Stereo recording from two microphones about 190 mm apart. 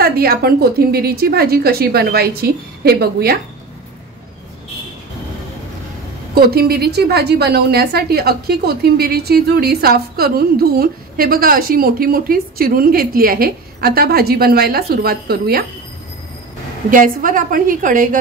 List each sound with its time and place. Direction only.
0.0 s a woman's voice: 50° right (ahead or behind)
6.3 s a woman's voice: 55° right (ahead or behind)
16.9 s a woman's voice: 45° right (ahead or behind)